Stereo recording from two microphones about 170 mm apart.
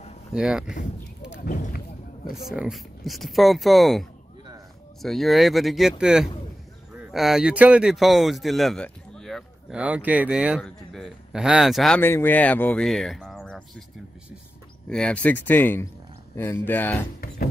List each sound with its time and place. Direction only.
0.3 s speech: 5° right (ahead or behind)
1.4 s speech: 55° left (ahead or behind)
2.3 s speech: 5° right (ahead or behind)
12.0 s speech: 15° left (ahead or behind)
14.9 s speech: 5° left (ahead or behind)